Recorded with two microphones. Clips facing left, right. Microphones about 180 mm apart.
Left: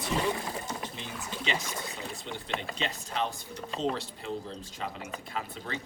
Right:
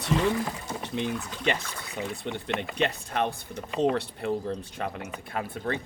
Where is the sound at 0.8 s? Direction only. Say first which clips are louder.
Right 9 dB; 60° right (ahead or behind).